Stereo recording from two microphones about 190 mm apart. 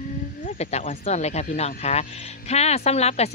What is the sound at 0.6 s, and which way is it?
Speech, 35° left (ahead or behind).